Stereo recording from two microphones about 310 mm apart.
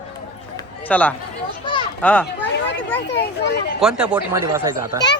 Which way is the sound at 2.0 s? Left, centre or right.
Centre.